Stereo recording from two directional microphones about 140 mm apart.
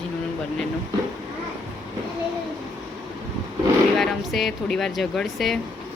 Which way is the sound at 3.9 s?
Centre (ahead or behind).